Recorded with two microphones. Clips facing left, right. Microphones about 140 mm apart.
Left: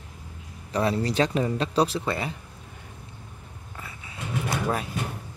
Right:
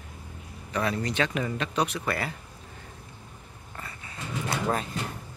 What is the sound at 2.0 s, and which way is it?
Speech, 20° left (ahead or behind).